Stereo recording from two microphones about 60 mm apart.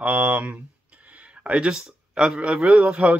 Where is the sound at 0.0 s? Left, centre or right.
Right.